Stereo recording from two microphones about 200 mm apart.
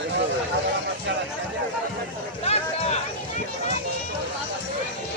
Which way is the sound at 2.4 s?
30° left (ahead or behind).